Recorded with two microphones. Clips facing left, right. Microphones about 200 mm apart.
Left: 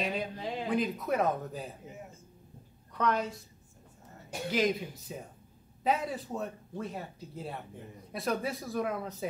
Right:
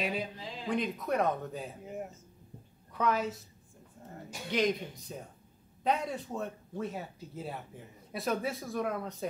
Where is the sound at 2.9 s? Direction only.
5° right (ahead or behind).